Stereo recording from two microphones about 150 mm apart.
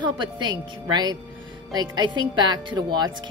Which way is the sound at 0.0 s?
30° right (ahead or behind).